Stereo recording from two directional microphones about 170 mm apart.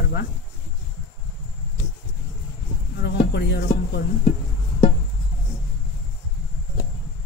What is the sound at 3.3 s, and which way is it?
Speech, 80° left.